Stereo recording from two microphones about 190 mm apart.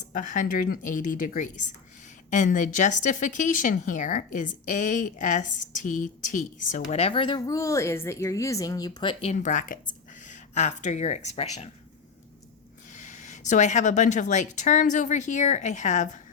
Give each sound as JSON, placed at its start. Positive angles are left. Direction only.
{"t": 0.1, "sound": "a woman's voice", "side_deg": 45}
{"t": 12.9, "sound": "a woman's voice", "side_deg": 40}